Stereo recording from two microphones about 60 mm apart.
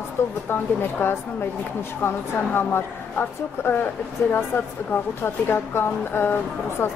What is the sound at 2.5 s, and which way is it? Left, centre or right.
A woman's voice, left.